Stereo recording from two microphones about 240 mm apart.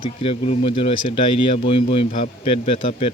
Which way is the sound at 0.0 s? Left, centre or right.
Left.